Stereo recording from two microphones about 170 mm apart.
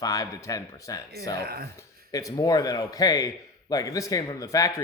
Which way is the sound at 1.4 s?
65° right (ahead or behind).